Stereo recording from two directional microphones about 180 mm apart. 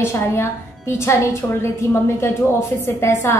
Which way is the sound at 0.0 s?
15° left (ahead or behind).